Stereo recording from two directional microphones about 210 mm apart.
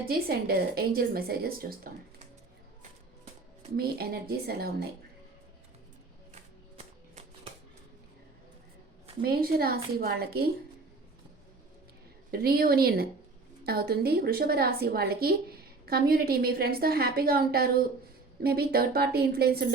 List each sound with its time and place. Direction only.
0.1 s a woman's voice: 45° right (ahead or behind)
3.8 s a woman's voice: 50° right (ahead or behind)
6.3 s music: 35° right (ahead or behind)
9.2 s a woman's voice: 45° right (ahead or behind)
12.3 s a woman's voice: 45° right (ahead or behind)